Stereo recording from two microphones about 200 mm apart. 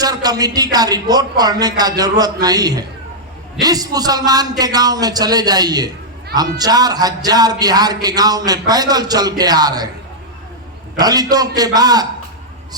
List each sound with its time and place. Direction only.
0.0 s speech: 20° right (ahead or behind)
10.9 s speech: 20° right (ahead or behind)